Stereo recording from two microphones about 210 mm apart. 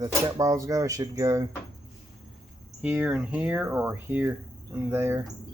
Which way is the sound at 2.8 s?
5° right (ahead or behind).